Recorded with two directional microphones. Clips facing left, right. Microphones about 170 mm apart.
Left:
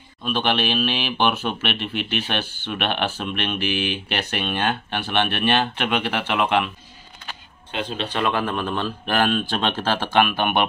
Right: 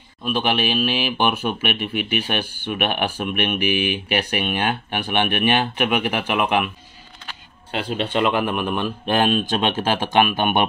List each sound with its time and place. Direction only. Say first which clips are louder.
0.2 s speech: right 1 dB; 10° right (ahead or behind)
8.1 s speech: right 3 dB; 20° right (ahead or behind)